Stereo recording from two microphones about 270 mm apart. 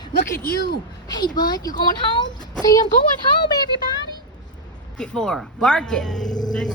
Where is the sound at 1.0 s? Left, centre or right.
Centre.